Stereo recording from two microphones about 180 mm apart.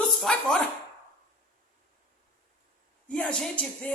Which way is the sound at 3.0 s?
5° left (ahead or behind).